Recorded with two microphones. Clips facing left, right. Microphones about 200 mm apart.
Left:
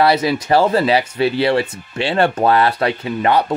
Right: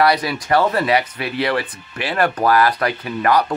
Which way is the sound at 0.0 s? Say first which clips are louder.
Left 3 dB; 25° left (ahead or behind).